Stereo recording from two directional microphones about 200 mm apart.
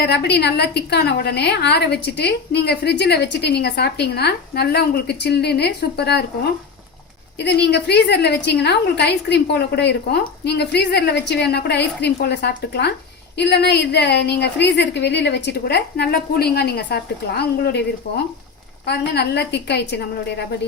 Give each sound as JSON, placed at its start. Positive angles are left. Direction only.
{"t": 0.0, "sound": "a woman's voice", "side_deg": 55}
{"t": 7.3, "sound": "a woman's voice", "side_deg": 55}
{"t": 18.9, "sound": "a woman's voice", "side_deg": 55}